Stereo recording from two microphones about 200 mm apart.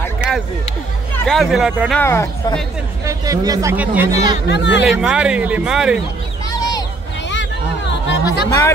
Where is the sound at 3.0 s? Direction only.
15° right (ahead or behind).